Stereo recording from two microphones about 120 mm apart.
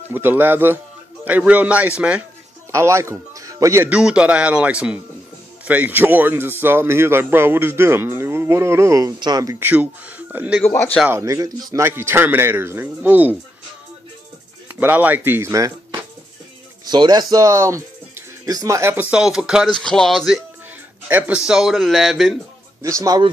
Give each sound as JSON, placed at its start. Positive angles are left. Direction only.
{"t": 0.1, "sound": "speech", "side_deg": -15}
{"t": 2.7, "sound": "speech", "side_deg": -25}
{"t": 3.9, "sound": "speech", "side_deg": -10}
{"t": 9.6, "sound": "speech", "side_deg": -15}
{"t": 10.6, "sound": "speech", "side_deg": 15}
{"t": 11.1, "sound": "speech", "side_deg": -25}
{"t": 14.8, "sound": "speech", "side_deg": -15}
{"t": 16.8, "sound": "speech", "side_deg": -35}
{"t": 19.7, "sound": "speech", "side_deg": 5}
{"t": 21.1, "sound": "speech", "side_deg": -15}
{"t": 22.8, "sound": "speech", "side_deg": -25}